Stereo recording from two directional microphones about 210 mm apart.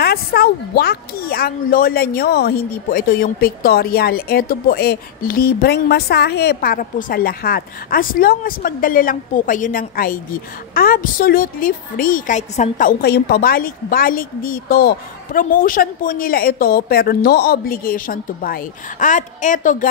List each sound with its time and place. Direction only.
0.0 s speech: 50° left (ahead or behind)